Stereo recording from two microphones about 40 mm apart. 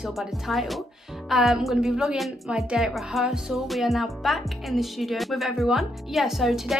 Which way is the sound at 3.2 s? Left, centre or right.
Centre.